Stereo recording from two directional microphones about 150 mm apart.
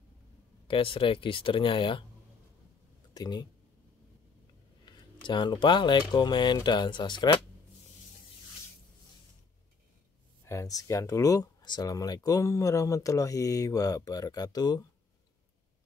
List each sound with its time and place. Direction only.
0.7 s speech: 35° left (ahead or behind)
3.2 s speech: 30° left (ahead or behind)
4.8 s speech: 30° left (ahead or behind)
10.4 s speech: 20° left (ahead or behind)